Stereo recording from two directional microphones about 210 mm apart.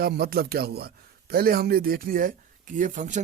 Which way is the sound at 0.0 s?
45° right (ahead or behind).